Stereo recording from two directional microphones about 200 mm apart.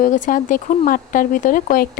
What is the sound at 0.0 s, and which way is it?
Speech, 40° left (ahead or behind).